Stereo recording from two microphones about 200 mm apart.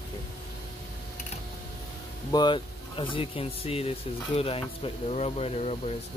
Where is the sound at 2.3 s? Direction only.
25° left (ahead or behind).